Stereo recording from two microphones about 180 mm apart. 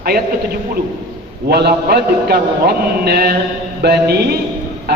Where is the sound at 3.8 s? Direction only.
65° right (ahead or behind).